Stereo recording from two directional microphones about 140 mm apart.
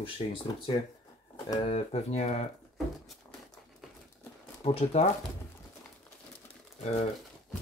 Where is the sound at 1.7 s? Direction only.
50° left (ahead or behind).